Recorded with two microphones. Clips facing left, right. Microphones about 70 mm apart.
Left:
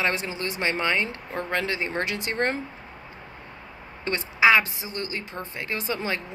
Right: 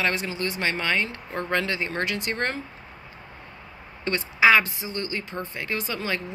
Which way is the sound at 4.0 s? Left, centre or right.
Centre.